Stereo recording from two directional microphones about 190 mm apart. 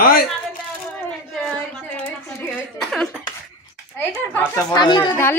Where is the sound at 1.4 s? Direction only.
Centre (ahead or behind).